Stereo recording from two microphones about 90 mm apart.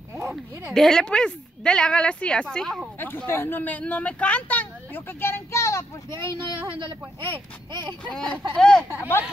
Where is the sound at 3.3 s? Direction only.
25° left (ahead or behind).